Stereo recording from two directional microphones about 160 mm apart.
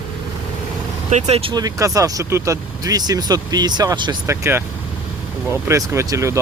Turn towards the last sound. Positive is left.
turn(degrees=-20)  # may be behind; listen again after turning